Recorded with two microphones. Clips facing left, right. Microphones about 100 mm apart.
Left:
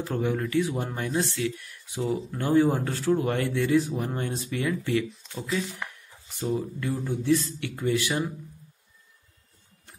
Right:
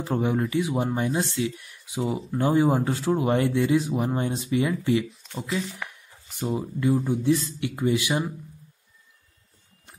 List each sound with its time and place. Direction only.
0.0 s speech: 20° right (ahead or behind)
6.4 s speech: 20° right (ahead or behind)